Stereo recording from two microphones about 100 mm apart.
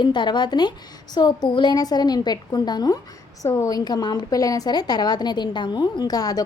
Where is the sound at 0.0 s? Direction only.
50° left (ahead or behind).